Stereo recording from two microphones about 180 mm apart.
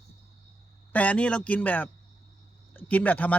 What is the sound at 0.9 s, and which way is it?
Speech, 10° left (ahead or behind).